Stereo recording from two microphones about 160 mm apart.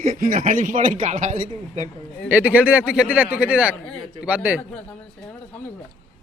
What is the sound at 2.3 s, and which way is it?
Speech, 10° right (ahead or behind).